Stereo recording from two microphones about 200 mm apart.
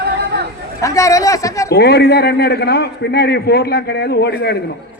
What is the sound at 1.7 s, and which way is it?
A man's voice, 55° left (ahead or behind).